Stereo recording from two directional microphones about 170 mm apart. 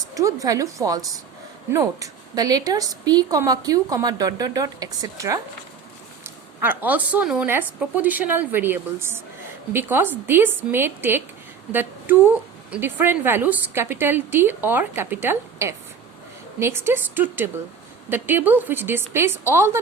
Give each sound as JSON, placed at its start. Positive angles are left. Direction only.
{"t": 0.1, "sound": "a woman's voice", "side_deg": -20}
{"t": 11.7, "sound": "a sound", "side_deg": -10}
{"t": 12.7, "sound": "a woman's voice", "side_deg": -10}